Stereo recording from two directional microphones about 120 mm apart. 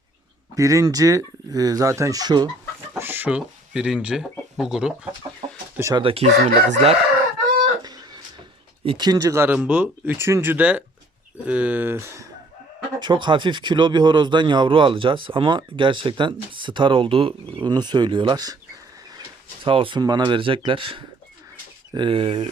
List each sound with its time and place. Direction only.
0.5 s speech: 25° right (ahead or behind)
3.0 s speech: 15° right (ahead or behind)
5.4 s chicken: 45° right (ahead or behind)
6.0 s speech: 50° right (ahead or behind)
6.2 s chicken: 65° right (ahead or behind)
7.9 s a sound: 35° right (ahead or behind)
8.8 s speech: 50° right (ahead or behind)
9.0 s speech: 30° right (ahead or behind)
9.6 s speech: 10° right (ahead or behind)
13.0 s speech: 40° right (ahead or behind)
17.7 s speech: 35° right (ahead or behind)
19.6 s speech: 45° right (ahead or behind)
20.0 s speech: 35° right (ahead or behind)